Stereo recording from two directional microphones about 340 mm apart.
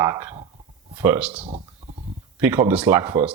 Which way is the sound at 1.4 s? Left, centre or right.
Centre.